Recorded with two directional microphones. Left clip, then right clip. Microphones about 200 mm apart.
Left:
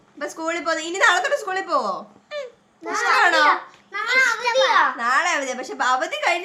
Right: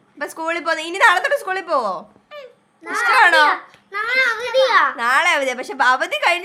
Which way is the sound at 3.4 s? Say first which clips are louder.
Right 2 dB; 60° right (ahead or behind).